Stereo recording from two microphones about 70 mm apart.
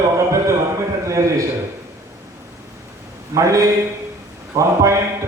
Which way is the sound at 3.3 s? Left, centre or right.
Right.